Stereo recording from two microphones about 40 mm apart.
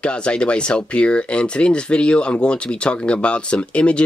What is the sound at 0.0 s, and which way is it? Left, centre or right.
Speech, left.